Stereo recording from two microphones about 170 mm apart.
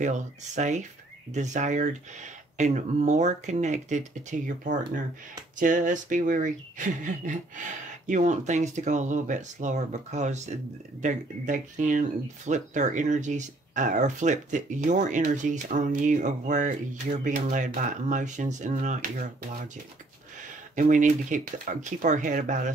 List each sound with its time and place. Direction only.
0.0 s speech: 45° right (ahead or behind)
20.3 s speech: 50° right (ahead or behind)